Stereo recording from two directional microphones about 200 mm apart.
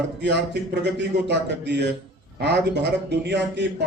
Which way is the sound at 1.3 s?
55° right (ahead or behind).